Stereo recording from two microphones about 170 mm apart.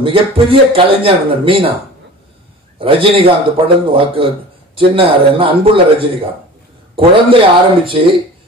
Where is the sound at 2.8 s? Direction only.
30° right (ahead or behind).